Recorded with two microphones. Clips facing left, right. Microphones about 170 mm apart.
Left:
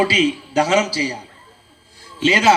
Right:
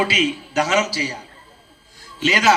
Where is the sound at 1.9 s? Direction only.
30° left (ahead or behind).